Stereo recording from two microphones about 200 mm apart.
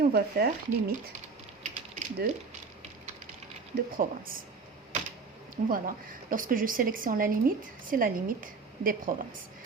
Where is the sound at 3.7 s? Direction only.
45° right (ahead or behind).